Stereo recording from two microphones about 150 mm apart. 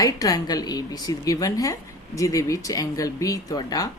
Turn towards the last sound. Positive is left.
turn(degrees=25)  # may be behind; listen again after turning